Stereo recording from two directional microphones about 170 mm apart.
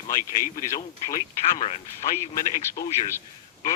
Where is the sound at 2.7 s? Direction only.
15° left (ahead or behind).